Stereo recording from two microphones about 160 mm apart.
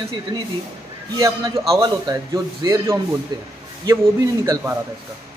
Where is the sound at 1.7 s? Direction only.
25° right (ahead or behind).